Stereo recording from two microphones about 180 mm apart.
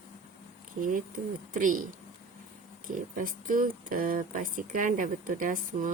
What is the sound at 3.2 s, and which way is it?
Speech, 50° right (ahead or behind).